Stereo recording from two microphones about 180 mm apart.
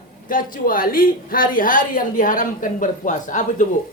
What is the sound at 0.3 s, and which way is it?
A woman's voice, 50° left (ahead or behind).